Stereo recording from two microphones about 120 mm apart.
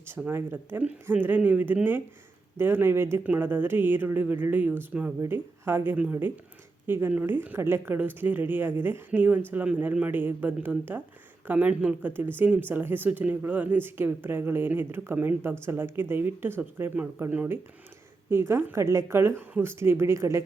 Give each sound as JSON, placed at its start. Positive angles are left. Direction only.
{"t": 0.0, "sound": "speech", "side_deg": -20}